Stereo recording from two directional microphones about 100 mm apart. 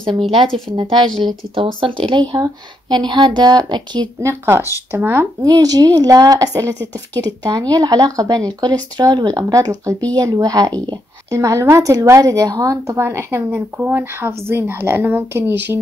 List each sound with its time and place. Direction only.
0.0 s speech: 55° right (ahead or behind)
4.2 s a woman's voice: 25° right (ahead or behind)
5.4 s a woman's voice: 40° right (ahead or behind); by 15.8 s 20° right (ahead or behind)